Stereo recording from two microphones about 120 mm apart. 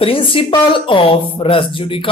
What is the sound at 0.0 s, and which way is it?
Speech, 45° left (ahead or behind).